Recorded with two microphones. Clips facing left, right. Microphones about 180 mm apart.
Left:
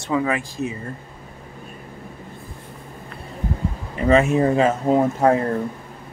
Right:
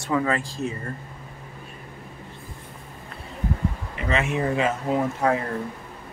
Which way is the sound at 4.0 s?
40° left (ahead or behind).